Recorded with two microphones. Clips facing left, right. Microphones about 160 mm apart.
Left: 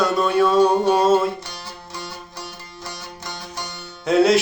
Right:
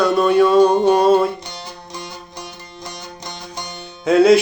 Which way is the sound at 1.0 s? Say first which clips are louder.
Right 3 dB; centre (ahead or behind).